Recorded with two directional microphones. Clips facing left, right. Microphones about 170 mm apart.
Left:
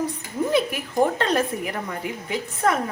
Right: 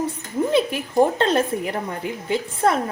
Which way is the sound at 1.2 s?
30° right (ahead or behind).